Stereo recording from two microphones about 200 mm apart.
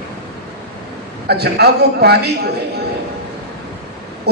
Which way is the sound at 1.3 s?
55° right (ahead or behind).